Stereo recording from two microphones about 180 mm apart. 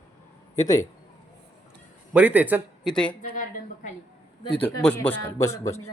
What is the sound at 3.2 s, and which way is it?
Speech, 45° left (ahead or behind).